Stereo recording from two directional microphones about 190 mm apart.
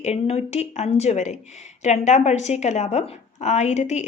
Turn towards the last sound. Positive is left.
turn(degrees=40)  # may be behind; listen again after turning